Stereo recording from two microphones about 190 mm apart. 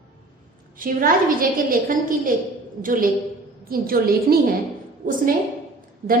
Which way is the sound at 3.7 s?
50° right (ahead or behind).